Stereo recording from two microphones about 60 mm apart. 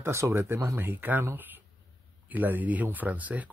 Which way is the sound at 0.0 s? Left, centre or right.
Right.